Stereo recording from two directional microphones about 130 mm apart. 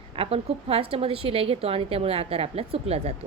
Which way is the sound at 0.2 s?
50° right (ahead or behind).